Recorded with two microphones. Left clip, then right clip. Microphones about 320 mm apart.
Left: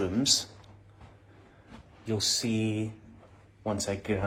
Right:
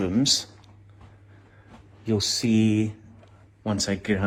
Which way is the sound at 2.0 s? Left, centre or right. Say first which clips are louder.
Right 4 dB; right.